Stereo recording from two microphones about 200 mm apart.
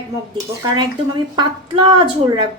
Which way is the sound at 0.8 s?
20° right (ahead or behind).